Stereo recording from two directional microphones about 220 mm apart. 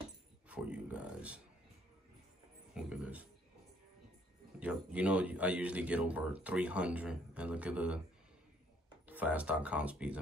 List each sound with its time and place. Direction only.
0.5 s a sound: 5° right (ahead or behind)
2.7 s music: 5° right (ahead or behind)
4.6 s speech: 5° right (ahead or behind)
9.0 s speech: 5° right (ahead or behind)